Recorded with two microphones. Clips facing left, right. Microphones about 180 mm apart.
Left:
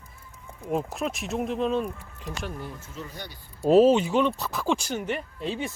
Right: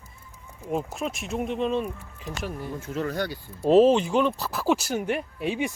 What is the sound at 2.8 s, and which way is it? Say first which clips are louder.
Speech: right 11 dB; 75° right (ahead or behind).